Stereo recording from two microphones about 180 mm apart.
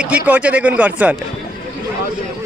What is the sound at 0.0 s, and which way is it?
Speech, 5° right (ahead or behind).